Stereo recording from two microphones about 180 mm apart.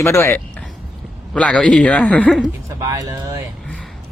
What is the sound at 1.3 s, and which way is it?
A man's voice, 5° left (ahead or behind).